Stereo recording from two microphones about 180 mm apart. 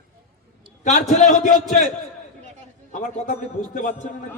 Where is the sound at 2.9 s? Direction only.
45° left (ahead or behind).